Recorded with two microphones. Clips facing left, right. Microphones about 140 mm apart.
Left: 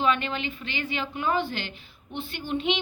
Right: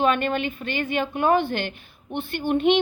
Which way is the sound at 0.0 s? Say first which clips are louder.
Right 4 dB; 50° right (ahead or behind).